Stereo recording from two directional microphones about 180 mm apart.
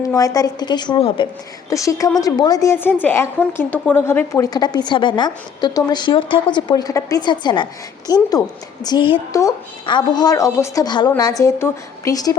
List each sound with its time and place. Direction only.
0.2 s a woman's voice: 20° left (ahead or behind)
1.7 s a woman's voice: 20° left (ahead or behind)